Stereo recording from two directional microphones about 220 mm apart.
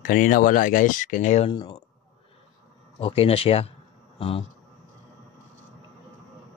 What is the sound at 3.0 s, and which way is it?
Speech, 25° left (ahead or behind).